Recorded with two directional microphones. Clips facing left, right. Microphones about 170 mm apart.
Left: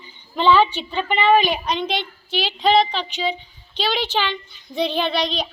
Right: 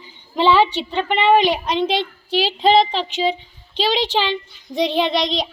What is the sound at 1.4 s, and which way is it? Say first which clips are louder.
A child's voice: right 3 dB; 25° right (ahead or behind).